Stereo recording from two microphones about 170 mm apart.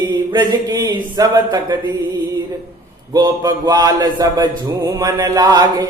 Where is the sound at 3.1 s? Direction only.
20° right (ahead or behind).